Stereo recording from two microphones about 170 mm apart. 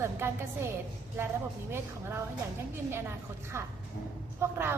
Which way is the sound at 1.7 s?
15° right (ahead or behind).